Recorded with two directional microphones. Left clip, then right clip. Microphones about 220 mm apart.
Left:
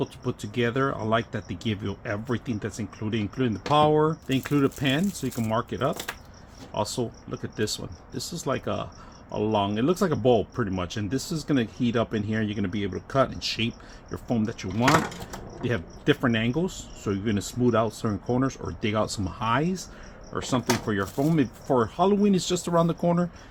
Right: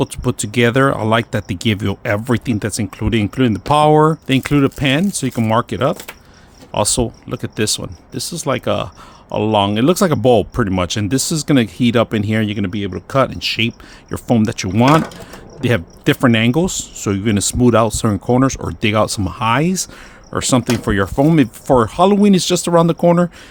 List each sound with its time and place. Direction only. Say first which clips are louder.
0.0 s speech: right 11 dB; 55° right (ahead or behind)